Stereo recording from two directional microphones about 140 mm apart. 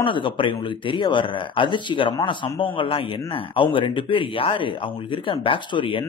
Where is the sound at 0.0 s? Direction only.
35° left (ahead or behind).